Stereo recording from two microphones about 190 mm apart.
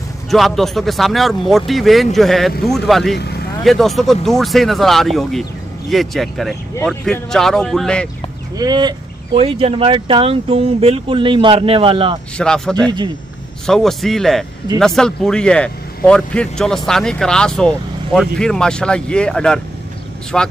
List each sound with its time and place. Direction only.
0.3 s speech: centre (ahead or behind)
8.5 s speech: 20° right (ahead or behind)
12.4 s speech: 5° left (ahead or behind)